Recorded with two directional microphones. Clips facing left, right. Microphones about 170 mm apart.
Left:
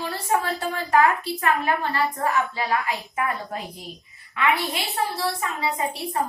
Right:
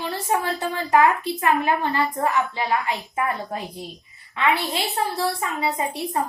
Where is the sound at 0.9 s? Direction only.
20° right (ahead or behind).